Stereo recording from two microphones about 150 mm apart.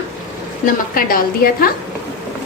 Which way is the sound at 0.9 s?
75° left (ahead or behind).